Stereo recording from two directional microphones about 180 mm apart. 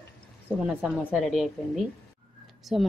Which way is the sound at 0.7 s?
5° right (ahead or behind).